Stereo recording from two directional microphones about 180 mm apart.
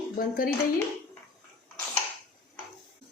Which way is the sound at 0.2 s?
50° left (ahead or behind).